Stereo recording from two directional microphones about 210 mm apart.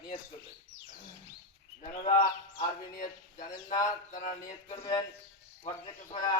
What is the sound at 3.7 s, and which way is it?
Speech, 15° left (ahead or behind).